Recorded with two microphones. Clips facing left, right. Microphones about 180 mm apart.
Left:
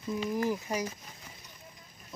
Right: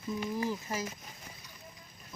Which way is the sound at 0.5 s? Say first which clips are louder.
Left 4 dB; 15° left (ahead or behind).